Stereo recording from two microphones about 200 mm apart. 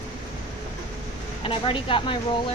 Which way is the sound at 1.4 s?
25° left (ahead or behind).